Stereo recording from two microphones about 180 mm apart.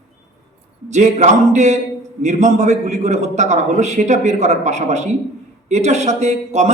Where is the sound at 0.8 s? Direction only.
40° right (ahead or behind).